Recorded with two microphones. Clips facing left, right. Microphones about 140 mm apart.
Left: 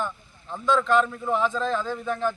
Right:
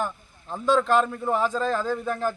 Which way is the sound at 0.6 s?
40° right (ahead or behind).